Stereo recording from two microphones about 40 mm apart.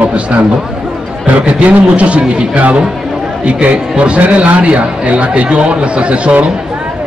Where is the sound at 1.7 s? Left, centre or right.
Right.